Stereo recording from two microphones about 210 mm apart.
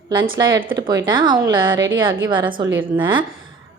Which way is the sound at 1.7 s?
65° right (ahead or behind).